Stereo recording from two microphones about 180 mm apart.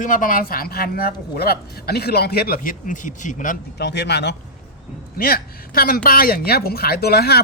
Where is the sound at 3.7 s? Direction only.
65° left (ahead or behind).